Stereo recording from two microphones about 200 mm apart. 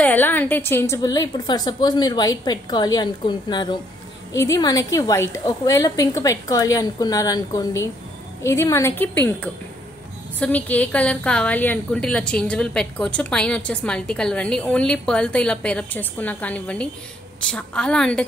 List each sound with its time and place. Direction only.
0.0 s a woman's voice: 10° left (ahead or behind)